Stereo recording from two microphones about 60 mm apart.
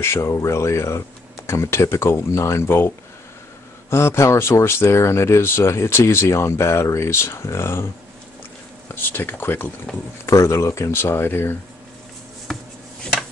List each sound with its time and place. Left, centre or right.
0.0 s speech: left
3.9 s speech: left
9.1 s speech: left
9.9 s speech: centre
10.2 s speech: left
12.5 s a sound: centre